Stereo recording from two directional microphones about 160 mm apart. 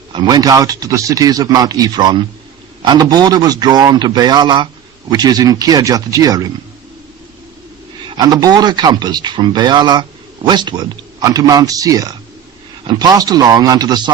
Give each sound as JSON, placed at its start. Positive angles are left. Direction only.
{"t": 0.1, "sound": "speech", "side_deg": -25}
{"t": 8.0, "sound": "speech", "side_deg": -25}